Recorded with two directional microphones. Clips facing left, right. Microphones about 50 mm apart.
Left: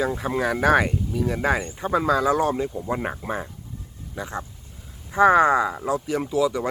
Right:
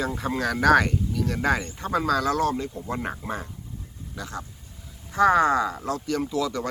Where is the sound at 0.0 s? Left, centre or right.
Centre.